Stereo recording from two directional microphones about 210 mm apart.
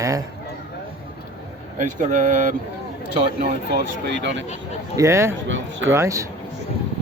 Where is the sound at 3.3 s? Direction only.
50° right (ahead or behind).